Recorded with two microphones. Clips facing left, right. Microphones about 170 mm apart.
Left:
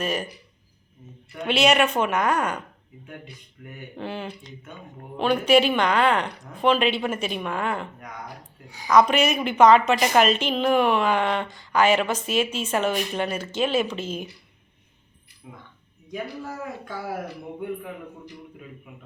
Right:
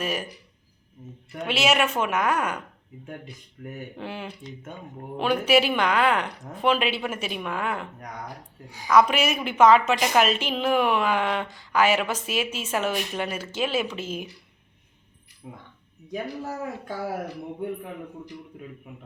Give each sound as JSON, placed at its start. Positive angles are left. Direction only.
{"t": 0.0, "sound": "a woman's voice", "side_deg": -10}
{"t": 1.5, "sound": "speech", "side_deg": -5}
{"t": 3.6, "sound": "speech", "side_deg": -45}
{"t": 3.9, "sound": "a woman's voice", "side_deg": -10}
{"t": 8.9, "sound": "a woman's voice", "side_deg": -5}
{"t": 15.4, "sound": "speech", "side_deg": -30}